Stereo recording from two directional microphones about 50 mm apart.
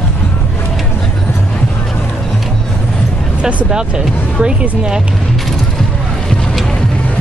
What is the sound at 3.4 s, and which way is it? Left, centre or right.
Music, right.